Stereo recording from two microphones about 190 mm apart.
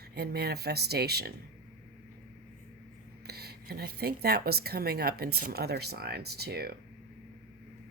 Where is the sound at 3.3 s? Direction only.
55° right (ahead or behind).